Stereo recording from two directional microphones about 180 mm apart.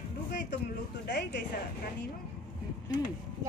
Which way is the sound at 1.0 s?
70° left (ahead or behind).